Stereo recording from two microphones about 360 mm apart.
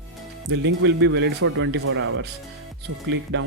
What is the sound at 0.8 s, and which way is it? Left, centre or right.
Speech, right.